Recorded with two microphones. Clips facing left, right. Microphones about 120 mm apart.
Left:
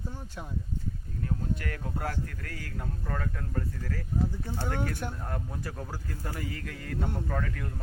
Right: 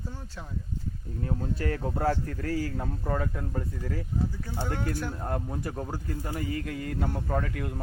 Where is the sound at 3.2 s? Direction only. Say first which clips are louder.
Right 3 dB; 20° right (ahead or behind).